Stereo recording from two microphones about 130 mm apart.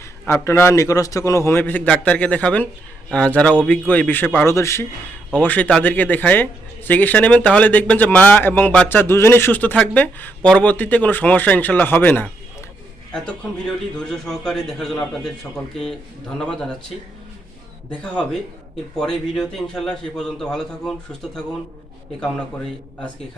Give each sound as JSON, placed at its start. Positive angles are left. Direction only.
{"t": 0.0, "sound": "a man's voice", "side_deg": 20}
{"t": 13.9, "sound": "a man's voice", "side_deg": 5}
{"t": 18.0, "sound": "a man's voice", "side_deg": 10}